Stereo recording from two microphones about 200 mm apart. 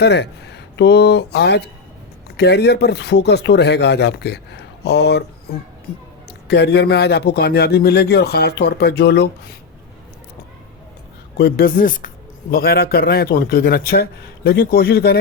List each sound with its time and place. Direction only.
0.0 s a man's voice: 55° left (ahead or behind)
11.3 s speech: 50° left (ahead or behind)